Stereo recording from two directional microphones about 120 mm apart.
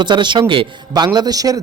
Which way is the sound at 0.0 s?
40° right (ahead or behind).